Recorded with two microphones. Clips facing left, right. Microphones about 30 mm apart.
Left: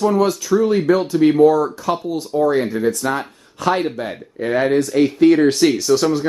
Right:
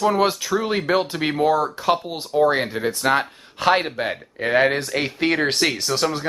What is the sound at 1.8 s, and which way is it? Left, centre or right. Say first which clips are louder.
Speech: left 1 dB; right.